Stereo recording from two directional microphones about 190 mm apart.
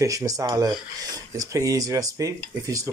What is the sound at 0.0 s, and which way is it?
Speech, 15° right (ahead or behind).